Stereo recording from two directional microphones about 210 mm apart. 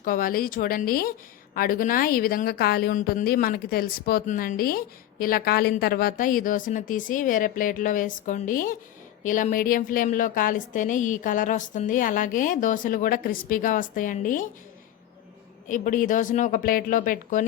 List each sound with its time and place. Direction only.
0.0 s a woman's voice: 40° left (ahead or behind)
15.7 s speech: 40° left (ahead or behind)